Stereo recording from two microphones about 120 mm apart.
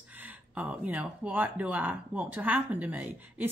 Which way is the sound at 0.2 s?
15° right (ahead or behind).